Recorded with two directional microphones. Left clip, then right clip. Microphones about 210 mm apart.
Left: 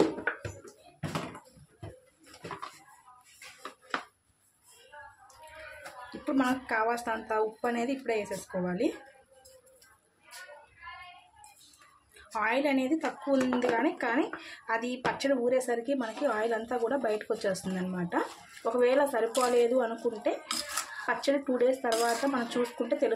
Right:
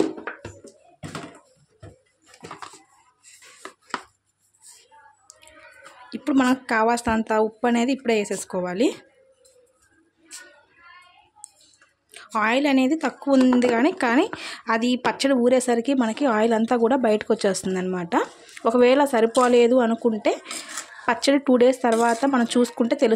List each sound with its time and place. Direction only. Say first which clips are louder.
6.0 s speech: right 8 dB; 45° right (ahead or behind)
12.1 s speech: right 8 dB; 50° right (ahead or behind)